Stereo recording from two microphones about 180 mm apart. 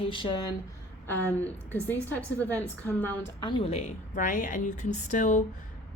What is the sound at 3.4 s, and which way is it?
A woman's voice, 25° left (ahead or behind).